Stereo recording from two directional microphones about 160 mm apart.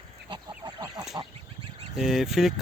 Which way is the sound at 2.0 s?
Centre (ahead or behind).